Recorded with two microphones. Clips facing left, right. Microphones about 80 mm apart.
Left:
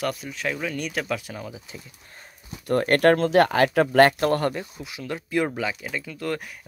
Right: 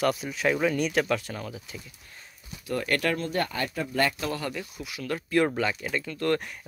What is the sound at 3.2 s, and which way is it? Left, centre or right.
Speech, left.